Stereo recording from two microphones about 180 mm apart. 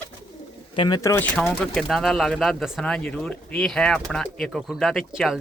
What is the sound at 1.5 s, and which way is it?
Speech, centre (ahead or behind).